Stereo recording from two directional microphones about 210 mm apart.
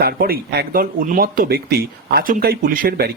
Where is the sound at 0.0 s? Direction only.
45° right (ahead or behind).